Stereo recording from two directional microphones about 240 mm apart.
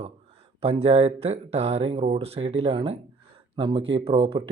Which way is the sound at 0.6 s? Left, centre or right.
Right.